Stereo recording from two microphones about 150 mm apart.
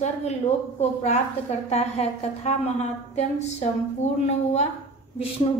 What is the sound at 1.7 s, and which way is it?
A woman's voice, 45° left (ahead or behind).